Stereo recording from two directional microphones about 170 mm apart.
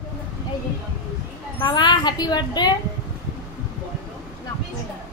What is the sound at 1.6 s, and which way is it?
A woman's voice, 25° left (ahead or behind).